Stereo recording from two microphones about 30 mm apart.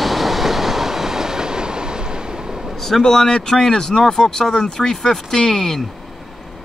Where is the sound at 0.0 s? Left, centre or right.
Centre; by 2.7 s right.